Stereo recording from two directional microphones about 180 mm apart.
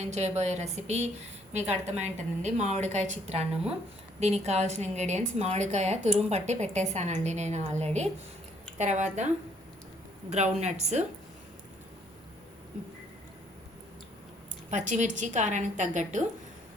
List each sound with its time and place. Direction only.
0.0 s a woman's voice: 40° right (ahead or behind)
3.5 s speech: 5° right (ahead or behind)
4.2 s a woman's voice: 35° right (ahead or behind)
14.7 s a woman's voice: 40° right (ahead or behind)